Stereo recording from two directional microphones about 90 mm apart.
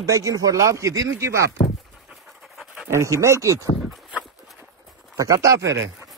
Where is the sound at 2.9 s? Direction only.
35° right (ahead or behind).